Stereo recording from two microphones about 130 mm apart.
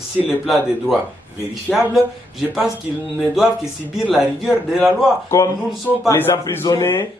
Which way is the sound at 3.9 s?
5° right (ahead or behind).